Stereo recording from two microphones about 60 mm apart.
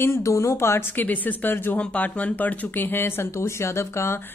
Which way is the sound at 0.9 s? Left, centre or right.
Left.